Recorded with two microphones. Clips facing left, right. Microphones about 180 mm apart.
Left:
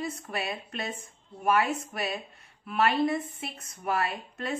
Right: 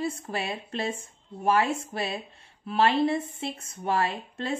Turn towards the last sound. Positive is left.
turn(degrees=-30)  # may be behind; listen again after turning